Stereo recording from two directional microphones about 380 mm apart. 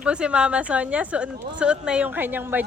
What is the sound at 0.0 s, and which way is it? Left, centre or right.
Speech, centre.